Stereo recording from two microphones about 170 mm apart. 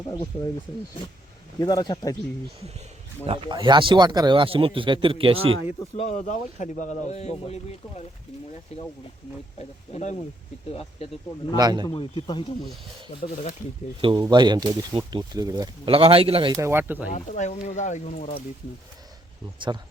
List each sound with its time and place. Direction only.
1.5 s speech: 25° left (ahead or behind)
3.2 s speech: 30° right (ahead or behind)
6.0 s speech: 45° left (ahead or behind)
11.5 s speech: 25° right (ahead or behind)
11.9 s speech: 30° left (ahead or behind)
13.2 s speech: 55° left (ahead or behind)
14.0 s speech: 30° right (ahead or behind)
15.9 s speech: 35° right (ahead or behind)
16.5 s speech: 15° right (ahead or behind)
17.1 s speech: 45° left (ahead or behind)
19.7 s speech: 25° right (ahead or behind)